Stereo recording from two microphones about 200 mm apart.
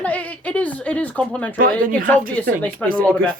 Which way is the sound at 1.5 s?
45° right (ahead or behind).